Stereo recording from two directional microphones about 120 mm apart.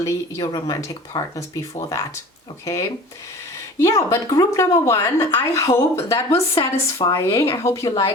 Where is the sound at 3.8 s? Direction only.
25° left (ahead or behind).